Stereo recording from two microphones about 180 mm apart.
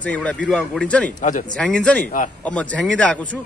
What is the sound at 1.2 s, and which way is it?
Speech, 45° left (ahead or behind).